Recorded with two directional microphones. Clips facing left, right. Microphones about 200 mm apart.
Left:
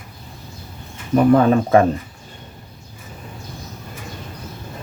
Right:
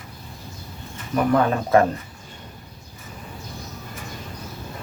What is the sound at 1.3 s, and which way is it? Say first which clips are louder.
Speech: left 4 dB; 20° left (ahead or behind).